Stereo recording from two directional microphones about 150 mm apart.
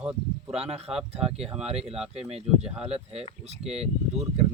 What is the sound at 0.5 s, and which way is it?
Speech, 45° right (ahead or behind).